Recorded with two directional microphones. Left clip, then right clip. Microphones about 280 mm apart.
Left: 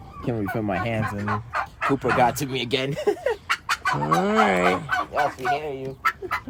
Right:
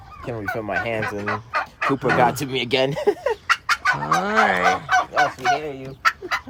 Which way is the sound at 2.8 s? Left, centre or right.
Right.